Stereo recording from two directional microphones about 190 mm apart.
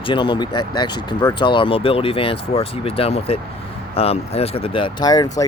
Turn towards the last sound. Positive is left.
turn(degrees=20)  # may be behind; listen again after turning